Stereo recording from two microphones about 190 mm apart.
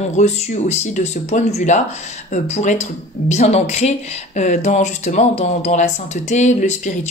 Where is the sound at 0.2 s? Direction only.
35° left (ahead or behind).